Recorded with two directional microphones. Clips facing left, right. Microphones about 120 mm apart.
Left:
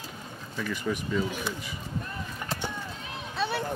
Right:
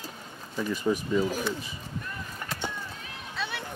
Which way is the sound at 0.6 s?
25° right (ahead or behind).